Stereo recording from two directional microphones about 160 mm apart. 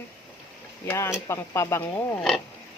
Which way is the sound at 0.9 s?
15° left (ahead or behind).